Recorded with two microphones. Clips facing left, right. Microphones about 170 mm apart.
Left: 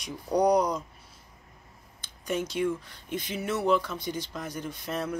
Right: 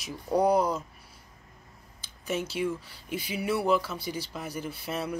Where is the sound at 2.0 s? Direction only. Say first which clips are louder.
Left 1 dB; 5° right (ahead or behind).